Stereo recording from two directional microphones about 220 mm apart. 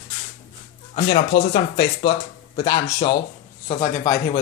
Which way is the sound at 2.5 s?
15° left (ahead or behind).